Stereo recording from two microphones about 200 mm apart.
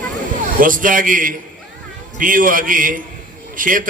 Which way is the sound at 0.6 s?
40° right (ahead or behind).